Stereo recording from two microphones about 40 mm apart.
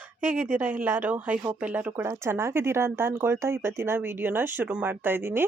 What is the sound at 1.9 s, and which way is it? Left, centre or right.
Speech, right.